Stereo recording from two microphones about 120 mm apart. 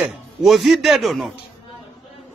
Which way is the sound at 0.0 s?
Centre (ahead or behind).